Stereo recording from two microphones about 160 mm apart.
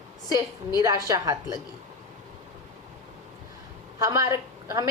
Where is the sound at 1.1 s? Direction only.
25° right (ahead or behind).